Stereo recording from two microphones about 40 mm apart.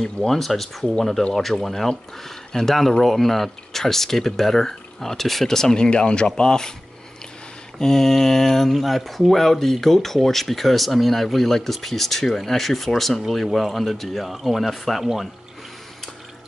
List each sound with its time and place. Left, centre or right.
0.0 s speech: centre
5.9 s speech: left
7.8 s speech: centre